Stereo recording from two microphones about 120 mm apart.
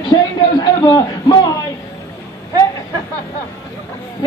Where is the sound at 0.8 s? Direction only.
30° left (ahead or behind).